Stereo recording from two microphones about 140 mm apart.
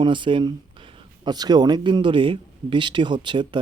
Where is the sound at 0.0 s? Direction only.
35° right (ahead or behind).